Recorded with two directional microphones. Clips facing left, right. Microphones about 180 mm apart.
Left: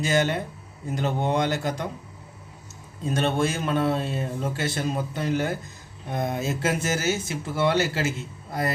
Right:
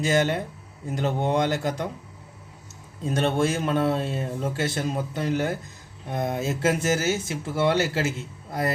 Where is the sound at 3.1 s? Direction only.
50° right (ahead or behind).